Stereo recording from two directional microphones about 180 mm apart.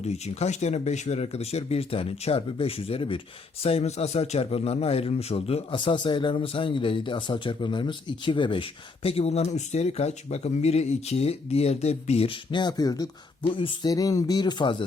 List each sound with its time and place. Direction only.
0.0 s a man's voice: 35° left (ahead or behind)